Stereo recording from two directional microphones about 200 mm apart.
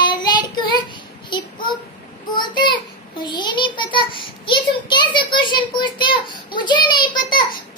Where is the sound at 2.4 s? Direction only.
20° left (ahead or behind).